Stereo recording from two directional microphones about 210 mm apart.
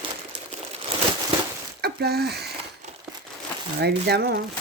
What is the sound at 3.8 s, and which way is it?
Speech, 50° right (ahead or behind).